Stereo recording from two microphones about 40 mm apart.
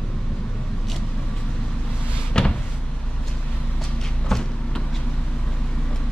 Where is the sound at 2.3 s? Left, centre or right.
Left.